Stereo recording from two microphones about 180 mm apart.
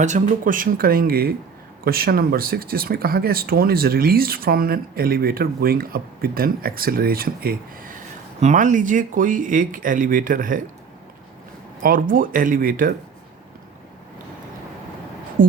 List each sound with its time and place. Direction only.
0.0 s speech: 45° right (ahead or behind)
8.4 s speech: 40° right (ahead or behind)
11.8 s speech: 50° right (ahead or behind)
15.4 s speech: 50° right (ahead or behind)